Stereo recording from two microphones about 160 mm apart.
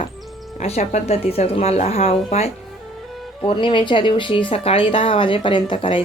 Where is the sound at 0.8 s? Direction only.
45° left (ahead or behind).